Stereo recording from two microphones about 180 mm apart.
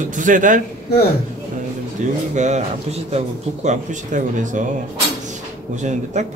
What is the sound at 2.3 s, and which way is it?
A man's voice, 40° right (ahead or behind).